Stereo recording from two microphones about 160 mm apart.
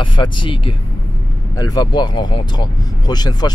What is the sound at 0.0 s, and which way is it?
Speech, 30° left (ahead or behind).